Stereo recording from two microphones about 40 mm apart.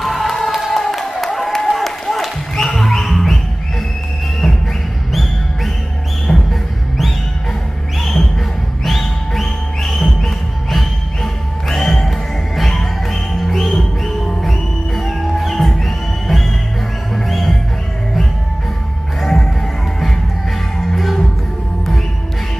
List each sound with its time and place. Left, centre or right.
0.0 s a sound: centre
6.3 s music: centre
8.8 s music: centre
19.2 s music: centre
20.9 s music: centre